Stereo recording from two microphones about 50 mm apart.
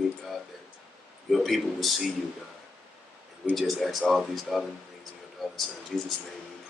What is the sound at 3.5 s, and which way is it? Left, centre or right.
Speech, centre.